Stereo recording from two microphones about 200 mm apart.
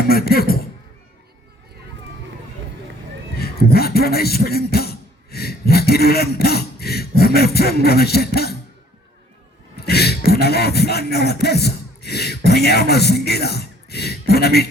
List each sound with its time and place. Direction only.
0.1 s speech: 50° left (ahead or behind)
3.3 s speech: 50° left (ahead or behind)
9.7 s beatboxing: 50° left (ahead or behind)